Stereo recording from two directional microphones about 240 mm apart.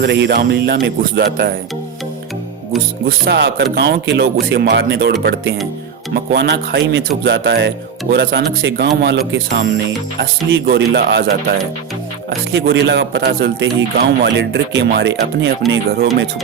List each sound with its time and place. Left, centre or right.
0.0 s a man's voice: right
3.1 s a man's voice: right
6.1 s a man's voice: right
12.5 s a man's voice: right